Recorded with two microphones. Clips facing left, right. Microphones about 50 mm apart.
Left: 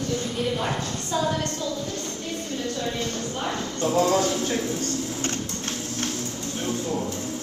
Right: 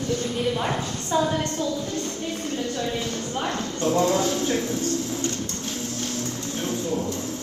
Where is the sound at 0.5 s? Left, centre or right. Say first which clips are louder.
Right 1 dB; centre.